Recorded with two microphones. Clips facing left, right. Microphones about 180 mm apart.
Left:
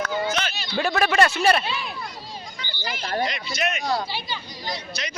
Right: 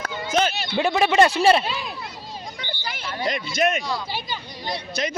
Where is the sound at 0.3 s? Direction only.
50° right (ahead or behind).